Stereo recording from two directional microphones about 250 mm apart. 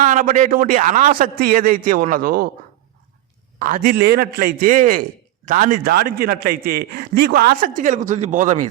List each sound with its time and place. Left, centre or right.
0.0 s speech: right
3.6 s speech: right